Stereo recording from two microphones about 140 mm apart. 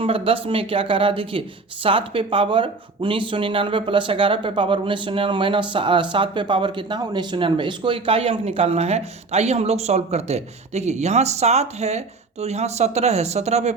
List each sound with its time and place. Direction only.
0.0 s speech: 40° right (ahead or behind)